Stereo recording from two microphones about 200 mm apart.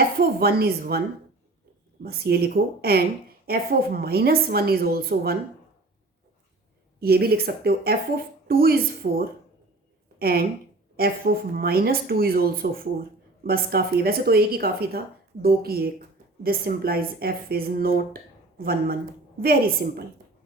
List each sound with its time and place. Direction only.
0.2 s speech: 50° right (ahead or behind)
2.0 s speech: 50° right (ahead or behind)
7.0 s speech: 50° right (ahead or behind)